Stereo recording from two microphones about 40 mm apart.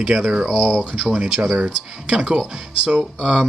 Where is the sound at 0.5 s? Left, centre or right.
Centre.